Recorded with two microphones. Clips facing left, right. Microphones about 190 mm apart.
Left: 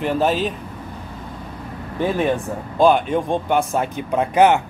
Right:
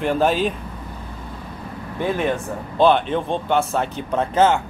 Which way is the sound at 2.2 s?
10° left (ahead or behind).